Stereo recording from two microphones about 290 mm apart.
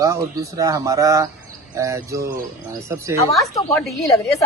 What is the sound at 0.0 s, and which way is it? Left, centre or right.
A man's voice, centre.